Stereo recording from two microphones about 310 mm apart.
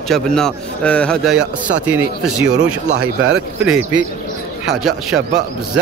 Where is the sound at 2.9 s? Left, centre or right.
Right.